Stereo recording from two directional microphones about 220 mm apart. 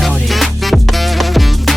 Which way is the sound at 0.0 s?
Centre (ahead or behind).